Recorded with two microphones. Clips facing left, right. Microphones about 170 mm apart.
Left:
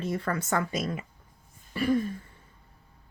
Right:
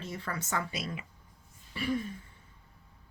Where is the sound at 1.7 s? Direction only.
50° left (ahead or behind).